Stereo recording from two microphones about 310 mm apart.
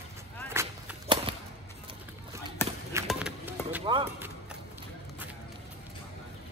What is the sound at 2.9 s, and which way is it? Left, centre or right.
Basketball bounce, centre.